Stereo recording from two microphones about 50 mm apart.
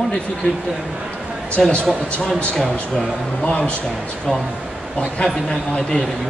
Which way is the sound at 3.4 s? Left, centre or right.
Left.